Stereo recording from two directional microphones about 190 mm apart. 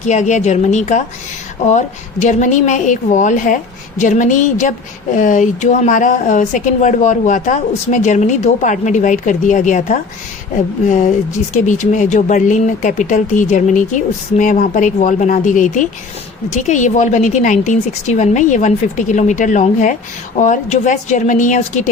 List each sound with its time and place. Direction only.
0.0 s speech: 40° left (ahead or behind)